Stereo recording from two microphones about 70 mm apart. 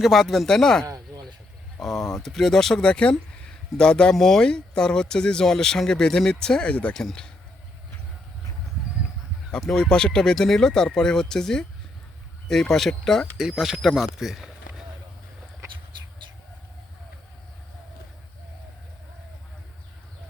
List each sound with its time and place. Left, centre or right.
0.0 s speech: centre
0.9 s chop: right
1.8 s speech: centre
6.9 s speech: centre
9.6 s speech: centre
13.3 s speech: centre